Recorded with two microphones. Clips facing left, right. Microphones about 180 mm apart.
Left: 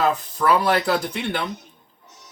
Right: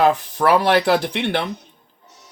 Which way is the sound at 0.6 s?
90° right.